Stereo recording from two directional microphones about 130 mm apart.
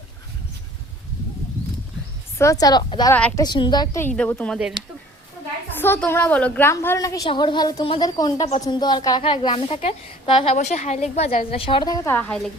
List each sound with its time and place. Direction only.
2.4 s a woman's voice: 25° left (ahead or behind)
3.1 s speech: 10° left (ahead or behind)
3.3 s a woman's voice: 35° left (ahead or behind)
4.3 s speech: 10° left (ahead or behind)
4.8 s speech: 35° right (ahead or behind)
5.7 s a sound: 15° left (ahead or behind)
6.1 s a woman's voice: 15° left (ahead or behind)
7.3 s a woman's voice: 35° left (ahead or behind)